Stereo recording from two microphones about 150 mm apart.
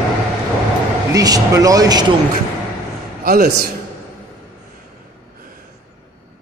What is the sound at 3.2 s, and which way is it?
Speech, 75° right (ahead or behind).